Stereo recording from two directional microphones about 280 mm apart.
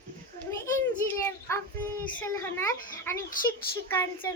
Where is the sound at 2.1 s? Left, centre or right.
Centre.